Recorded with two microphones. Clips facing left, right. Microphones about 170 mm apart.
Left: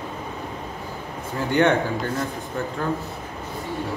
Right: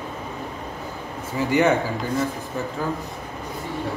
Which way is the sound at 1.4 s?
5° right (ahead or behind).